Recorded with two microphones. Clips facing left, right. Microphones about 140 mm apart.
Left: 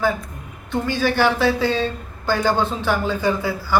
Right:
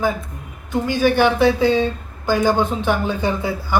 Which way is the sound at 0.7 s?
15° right (ahead or behind).